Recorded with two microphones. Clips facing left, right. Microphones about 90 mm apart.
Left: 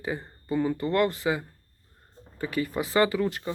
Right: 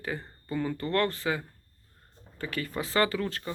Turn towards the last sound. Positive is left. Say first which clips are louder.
# left 4 dB
turn(degrees=15)  # may be behind; listen again after turning